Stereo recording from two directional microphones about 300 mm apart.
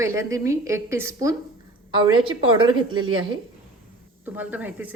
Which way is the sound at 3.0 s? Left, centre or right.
Right.